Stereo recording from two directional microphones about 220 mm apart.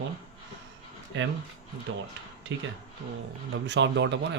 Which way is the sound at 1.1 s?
55° right (ahead or behind).